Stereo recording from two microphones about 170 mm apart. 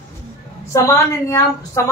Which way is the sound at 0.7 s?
15° left (ahead or behind).